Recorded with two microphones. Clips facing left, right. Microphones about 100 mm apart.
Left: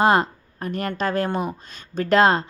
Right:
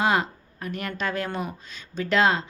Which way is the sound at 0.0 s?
40° left (ahead or behind).